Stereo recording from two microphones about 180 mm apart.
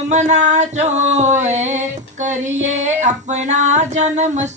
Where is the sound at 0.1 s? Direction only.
40° right (ahead or behind).